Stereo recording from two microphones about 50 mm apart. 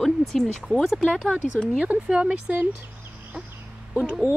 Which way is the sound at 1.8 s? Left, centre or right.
Right.